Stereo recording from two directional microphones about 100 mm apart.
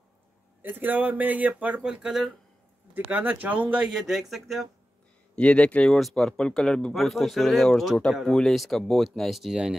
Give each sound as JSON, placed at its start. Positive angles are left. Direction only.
{"t": 0.6, "sound": "speech", "side_deg": -20}
{"t": 2.9, "sound": "speech", "side_deg": -20}
{"t": 5.3, "sound": "speech", "side_deg": 10}